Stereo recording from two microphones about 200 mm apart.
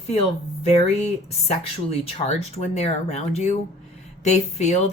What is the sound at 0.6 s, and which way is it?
Speech, 35° left (ahead or behind).